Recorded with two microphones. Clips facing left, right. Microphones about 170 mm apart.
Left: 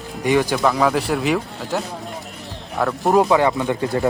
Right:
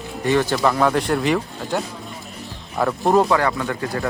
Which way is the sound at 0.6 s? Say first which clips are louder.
Even; centre (ahead or behind).